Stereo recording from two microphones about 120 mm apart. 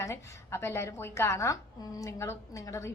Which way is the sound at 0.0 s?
20° left (ahead or behind).